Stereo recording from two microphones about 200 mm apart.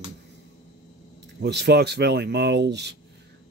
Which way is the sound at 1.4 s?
55° right (ahead or behind).